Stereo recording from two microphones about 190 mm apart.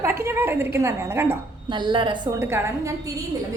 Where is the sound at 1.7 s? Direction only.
25° right (ahead or behind).